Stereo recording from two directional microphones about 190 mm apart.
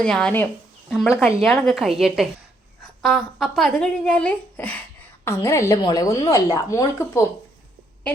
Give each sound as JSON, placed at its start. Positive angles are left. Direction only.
{"t": 0.0, "sound": "a woman's voice", "side_deg": 5}